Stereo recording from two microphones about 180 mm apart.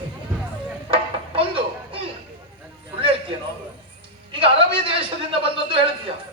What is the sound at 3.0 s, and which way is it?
Music, 30° right (ahead or behind).